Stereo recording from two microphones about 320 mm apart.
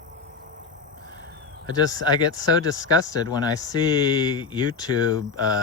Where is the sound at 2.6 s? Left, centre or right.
Centre.